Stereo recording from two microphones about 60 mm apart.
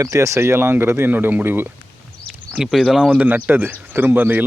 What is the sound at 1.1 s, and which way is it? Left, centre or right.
Speech, right.